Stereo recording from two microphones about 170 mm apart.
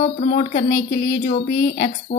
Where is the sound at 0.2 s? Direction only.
40° left (ahead or behind).